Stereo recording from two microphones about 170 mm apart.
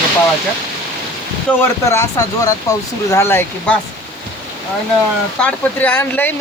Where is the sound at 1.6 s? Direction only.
15° left (ahead or behind).